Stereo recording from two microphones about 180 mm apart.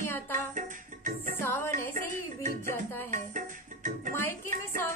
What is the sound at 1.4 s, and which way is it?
Music, 10° left (ahead or behind).